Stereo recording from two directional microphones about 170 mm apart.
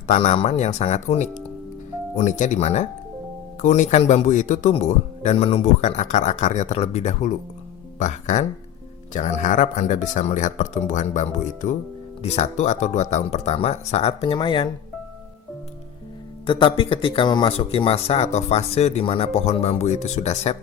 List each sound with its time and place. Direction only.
0.1 s speech: 40° left (ahead or behind)
16.5 s speech: 30° left (ahead or behind)